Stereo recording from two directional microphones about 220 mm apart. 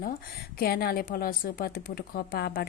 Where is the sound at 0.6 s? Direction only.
45° left (ahead or behind).